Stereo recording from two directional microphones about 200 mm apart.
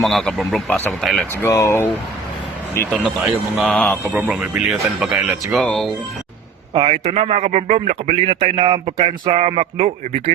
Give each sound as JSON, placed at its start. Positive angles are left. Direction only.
{"t": 0.0, "sound": "speech", "side_deg": 0}
{"t": 1.4, "sound": "speech", "side_deg": 15}
{"t": 2.7, "sound": "speech", "side_deg": 5}
{"t": 4.1, "sound": "speech", "side_deg": -5}
{"t": 6.7, "sound": "speech", "side_deg": -30}